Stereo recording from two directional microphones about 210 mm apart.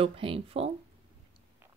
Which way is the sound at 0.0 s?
25° right (ahead or behind).